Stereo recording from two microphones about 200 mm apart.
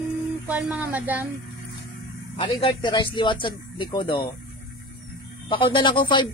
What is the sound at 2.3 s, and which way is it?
Speech, 25° left (ahead or behind).